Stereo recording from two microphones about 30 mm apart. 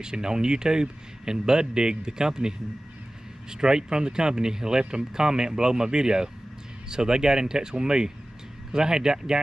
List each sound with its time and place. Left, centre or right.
0.0 s speech: right